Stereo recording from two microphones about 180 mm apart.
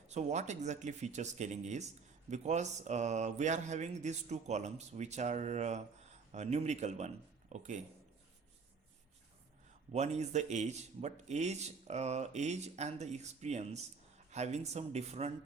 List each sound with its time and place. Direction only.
0.1 s speech: 40° right (ahead or behind)
9.9 s speech: 40° right (ahead or behind)